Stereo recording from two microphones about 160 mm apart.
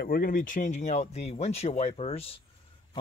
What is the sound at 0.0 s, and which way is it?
Speech, 65° left (ahead or behind).